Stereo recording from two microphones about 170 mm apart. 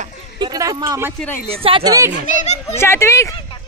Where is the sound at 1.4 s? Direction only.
30° right (ahead or behind).